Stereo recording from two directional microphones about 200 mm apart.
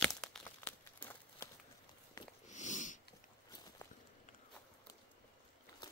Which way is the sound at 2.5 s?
35° left (ahead or behind).